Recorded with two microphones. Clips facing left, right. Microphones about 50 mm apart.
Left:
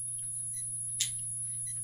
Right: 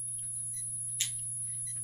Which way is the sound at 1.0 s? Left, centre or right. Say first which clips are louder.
Even; right.